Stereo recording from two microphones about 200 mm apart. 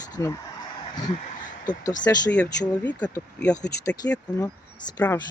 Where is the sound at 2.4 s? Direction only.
5° left (ahead or behind).